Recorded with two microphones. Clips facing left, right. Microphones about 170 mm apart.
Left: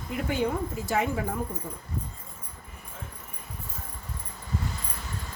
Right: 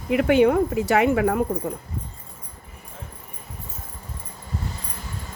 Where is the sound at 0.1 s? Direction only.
75° right (ahead or behind).